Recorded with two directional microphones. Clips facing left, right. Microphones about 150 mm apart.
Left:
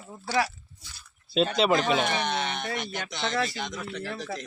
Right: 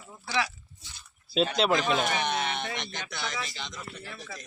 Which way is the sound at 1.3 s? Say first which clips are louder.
Left 2 dB; centre (ahead or behind).